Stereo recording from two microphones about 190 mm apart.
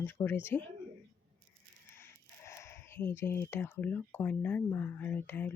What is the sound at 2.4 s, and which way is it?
Speech, 15° left (ahead or behind).